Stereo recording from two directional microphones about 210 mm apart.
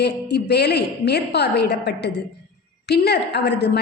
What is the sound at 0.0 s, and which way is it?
A woman's voice, 50° left (ahead or behind).